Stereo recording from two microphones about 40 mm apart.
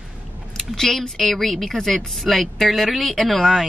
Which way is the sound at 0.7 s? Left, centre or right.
Centre.